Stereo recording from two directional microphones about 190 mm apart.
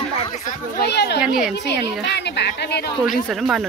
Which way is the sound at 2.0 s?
60° left (ahead or behind).